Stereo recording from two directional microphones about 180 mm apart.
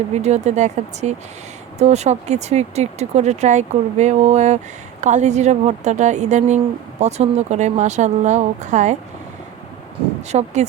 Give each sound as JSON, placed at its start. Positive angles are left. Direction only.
{"t": 0.2, "sound": "speech", "side_deg": -40}
{"t": 10.3, "sound": "speech", "side_deg": -40}